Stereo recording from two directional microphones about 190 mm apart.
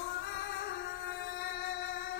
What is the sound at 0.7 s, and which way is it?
Music, 60° left (ahead or behind).